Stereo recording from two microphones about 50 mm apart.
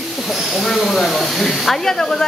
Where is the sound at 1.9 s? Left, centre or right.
Centre.